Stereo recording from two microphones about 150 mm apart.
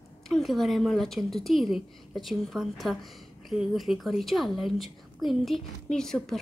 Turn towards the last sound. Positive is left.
turn(degrees=0)  # may be behind; listen again after turning